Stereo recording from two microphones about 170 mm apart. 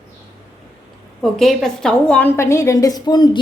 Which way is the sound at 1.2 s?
Centre (ahead or behind).